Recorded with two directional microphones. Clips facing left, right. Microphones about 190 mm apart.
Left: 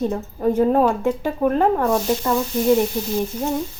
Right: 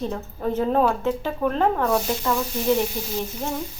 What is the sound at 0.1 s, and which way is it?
A woman's voice, 15° left (ahead or behind).